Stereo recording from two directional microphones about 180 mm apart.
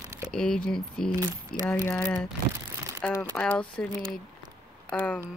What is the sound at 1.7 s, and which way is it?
Speech, 15° left (ahead or behind).